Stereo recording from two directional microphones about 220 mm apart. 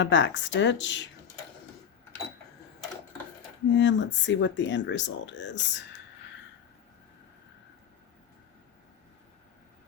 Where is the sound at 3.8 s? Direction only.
55° left (ahead or behind).